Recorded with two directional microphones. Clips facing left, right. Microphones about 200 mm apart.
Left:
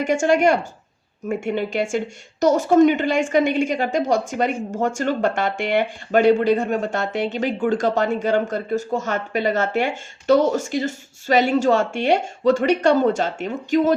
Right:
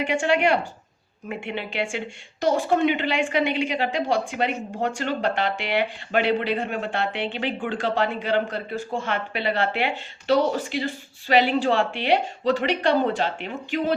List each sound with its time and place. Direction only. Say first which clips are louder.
0.0 s speech: left 4 dB; 45° left (ahead or behind)